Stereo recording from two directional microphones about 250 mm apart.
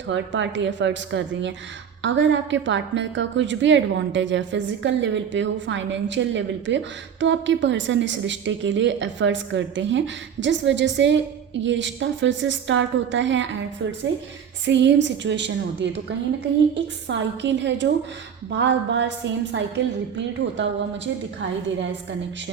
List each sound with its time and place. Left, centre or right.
0.1 s a woman's voice: right